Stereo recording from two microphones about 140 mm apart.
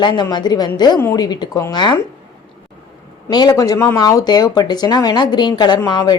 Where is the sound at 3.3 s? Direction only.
25° left (ahead or behind).